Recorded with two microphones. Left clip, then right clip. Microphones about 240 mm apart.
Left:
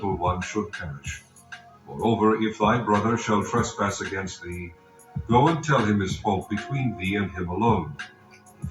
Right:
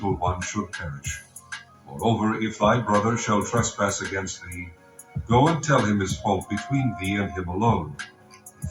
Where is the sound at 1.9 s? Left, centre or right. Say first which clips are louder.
Left 3 dB; right.